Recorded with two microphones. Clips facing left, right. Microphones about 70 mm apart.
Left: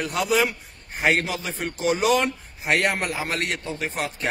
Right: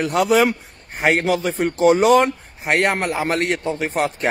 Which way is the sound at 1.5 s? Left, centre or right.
Right.